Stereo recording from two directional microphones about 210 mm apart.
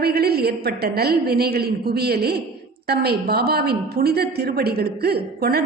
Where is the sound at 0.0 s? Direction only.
50° right (ahead or behind).